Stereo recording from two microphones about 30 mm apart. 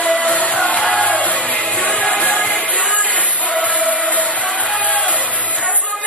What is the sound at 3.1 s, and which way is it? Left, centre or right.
Music, left.